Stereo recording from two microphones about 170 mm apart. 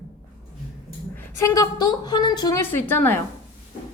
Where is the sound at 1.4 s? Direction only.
20° left (ahead or behind).